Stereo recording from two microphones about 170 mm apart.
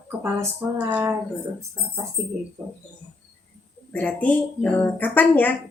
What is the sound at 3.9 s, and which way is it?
Speech, 10° left (ahead or behind).